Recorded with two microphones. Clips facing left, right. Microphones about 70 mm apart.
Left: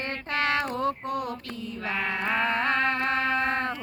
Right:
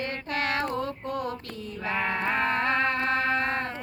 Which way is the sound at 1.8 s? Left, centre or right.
Centre.